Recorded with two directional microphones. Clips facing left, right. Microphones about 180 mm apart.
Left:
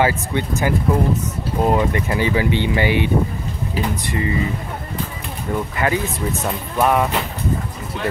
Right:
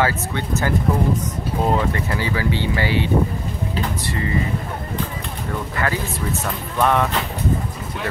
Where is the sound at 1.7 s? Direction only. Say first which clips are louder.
Left 3 dB; 20° left (ahead or behind).